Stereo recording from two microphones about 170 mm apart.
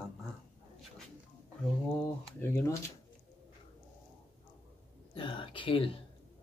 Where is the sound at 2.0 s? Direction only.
15° left (ahead or behind).